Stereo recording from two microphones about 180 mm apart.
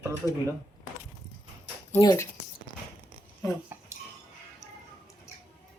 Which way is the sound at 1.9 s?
20° left (ahead or behind).